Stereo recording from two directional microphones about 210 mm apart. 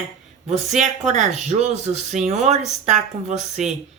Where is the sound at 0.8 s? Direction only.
35° right (ahead or behind).